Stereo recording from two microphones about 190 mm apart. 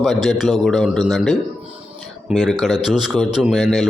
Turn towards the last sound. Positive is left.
turn(degrees=0)  # may be behind; listen again after turning